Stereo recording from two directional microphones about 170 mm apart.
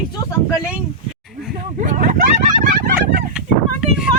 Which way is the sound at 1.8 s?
55° right (ahead or behind).